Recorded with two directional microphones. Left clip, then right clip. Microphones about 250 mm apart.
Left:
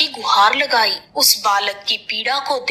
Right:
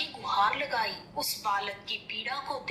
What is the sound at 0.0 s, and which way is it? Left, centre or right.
A woman's voice, left.